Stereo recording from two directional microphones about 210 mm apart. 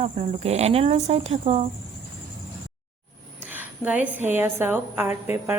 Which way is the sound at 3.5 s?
10° right (ahead or behind).